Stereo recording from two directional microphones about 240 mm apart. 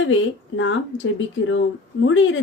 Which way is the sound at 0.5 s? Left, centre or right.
Left.